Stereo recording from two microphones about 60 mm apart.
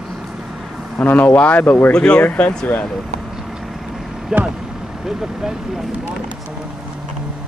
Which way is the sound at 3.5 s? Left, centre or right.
Centre.